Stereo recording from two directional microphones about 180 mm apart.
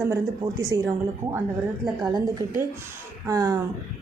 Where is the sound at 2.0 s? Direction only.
20° right (ahead or behind).